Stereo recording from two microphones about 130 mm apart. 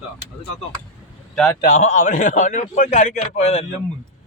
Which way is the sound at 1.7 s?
70° left (ahead or behind).